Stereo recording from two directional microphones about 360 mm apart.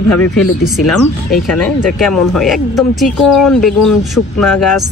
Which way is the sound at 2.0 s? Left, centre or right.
Centre.